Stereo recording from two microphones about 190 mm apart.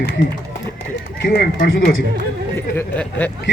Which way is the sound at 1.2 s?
55° left (ahead or behind).